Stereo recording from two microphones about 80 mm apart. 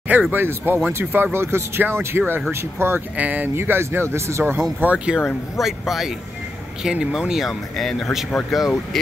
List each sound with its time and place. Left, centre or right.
0.3 s speech: right
4.7 s speech: centre